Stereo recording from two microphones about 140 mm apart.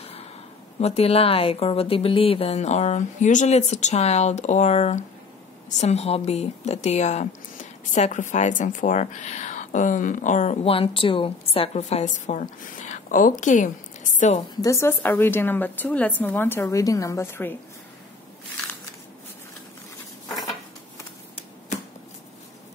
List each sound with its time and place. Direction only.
0.0 s a sound: 45° left (ahead or behind)
0.7 s a woman's voice: 45° left (ahead or behind)
14.5 s a woman's voice: 25° left (ahead or behind)